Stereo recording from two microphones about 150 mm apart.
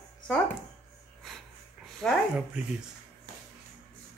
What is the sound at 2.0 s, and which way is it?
Speech, 5° left (ahead or behind).